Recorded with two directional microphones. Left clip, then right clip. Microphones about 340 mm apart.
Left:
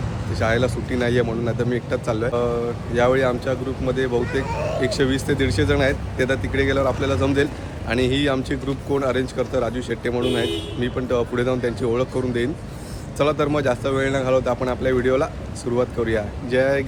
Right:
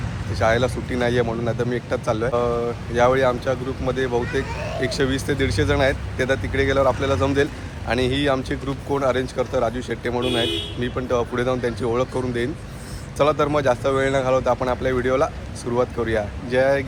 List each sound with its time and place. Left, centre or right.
0.3 s speech: centre
4.4 s speech: left
4.8 s speech: centre